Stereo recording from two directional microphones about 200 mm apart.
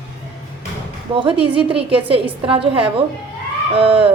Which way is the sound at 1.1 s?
25° right (ahead or behind).